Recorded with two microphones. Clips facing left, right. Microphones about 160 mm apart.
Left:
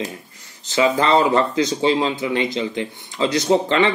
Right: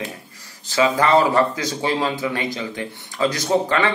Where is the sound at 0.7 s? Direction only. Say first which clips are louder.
Even; 25° left (ahead or behind).